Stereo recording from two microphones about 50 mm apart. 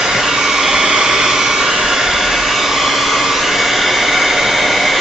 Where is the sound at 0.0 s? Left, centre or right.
Centre.